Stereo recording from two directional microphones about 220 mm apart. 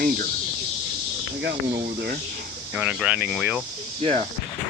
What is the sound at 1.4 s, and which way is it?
Speech, 50° right (ahead or behind).